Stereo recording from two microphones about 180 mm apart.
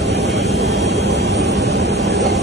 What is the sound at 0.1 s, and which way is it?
Vehicle, 70° right (ahead or behind).